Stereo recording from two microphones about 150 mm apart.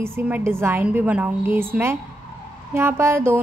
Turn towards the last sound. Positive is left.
turn(degrees=-15)  # may be behind; listen again after turning